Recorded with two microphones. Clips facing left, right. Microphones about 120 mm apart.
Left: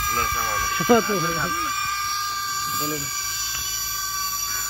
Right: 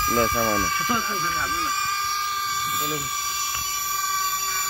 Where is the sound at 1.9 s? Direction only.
5° right (ahead or behind).